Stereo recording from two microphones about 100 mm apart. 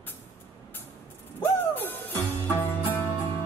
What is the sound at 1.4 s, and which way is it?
Music, 20° left (ahead or behind).